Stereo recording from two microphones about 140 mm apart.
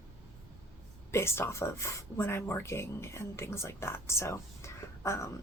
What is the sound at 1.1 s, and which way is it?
Speech, 20° left (ahead or behind).